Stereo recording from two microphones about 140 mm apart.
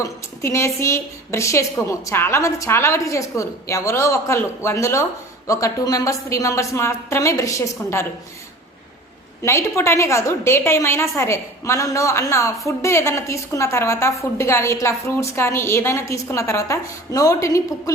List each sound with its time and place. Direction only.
0.0 s a woman's voice: 20° left (ahead or behind)
9.4 s a woman's voice: 20° left (ahead or behind)